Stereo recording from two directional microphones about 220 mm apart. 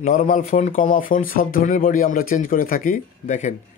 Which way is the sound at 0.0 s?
35° left (ahead or behind).